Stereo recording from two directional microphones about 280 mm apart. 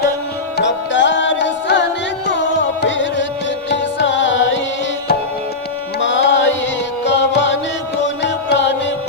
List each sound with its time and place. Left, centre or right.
0.5 s music: left
2.8 s music: left
6.0 s music: left